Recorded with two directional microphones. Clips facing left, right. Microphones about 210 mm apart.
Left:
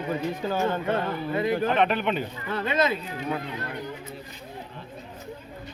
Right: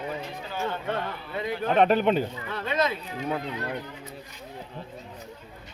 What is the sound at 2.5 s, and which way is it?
Speech, centre (ahead or behind).